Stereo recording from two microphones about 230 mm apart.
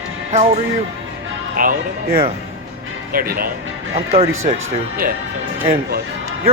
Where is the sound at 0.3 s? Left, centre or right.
Right.